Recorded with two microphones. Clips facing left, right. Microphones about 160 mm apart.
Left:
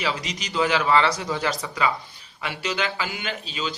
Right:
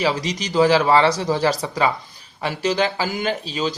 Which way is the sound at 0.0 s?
35° right (ahead or behind).